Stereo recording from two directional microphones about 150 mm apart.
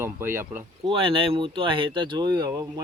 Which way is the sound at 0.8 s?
35° right (ahead or behind).